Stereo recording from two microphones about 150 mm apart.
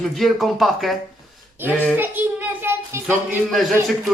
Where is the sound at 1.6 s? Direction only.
15° right (ahead or behind).